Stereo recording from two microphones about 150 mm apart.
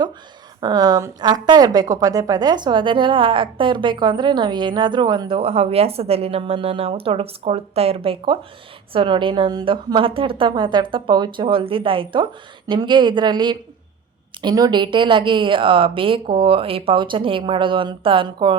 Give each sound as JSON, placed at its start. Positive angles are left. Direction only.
{"t": 0.6, "sound": "a woman's voice", "side_deg": -25}